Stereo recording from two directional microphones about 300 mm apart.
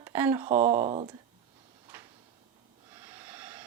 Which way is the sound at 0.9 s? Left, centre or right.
Right.